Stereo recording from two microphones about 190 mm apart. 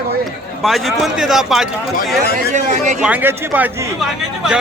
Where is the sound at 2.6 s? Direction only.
40° right (ahead or behind).